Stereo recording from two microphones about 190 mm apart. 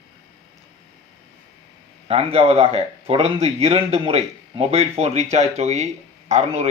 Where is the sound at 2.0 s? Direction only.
30° right (ahead or behind).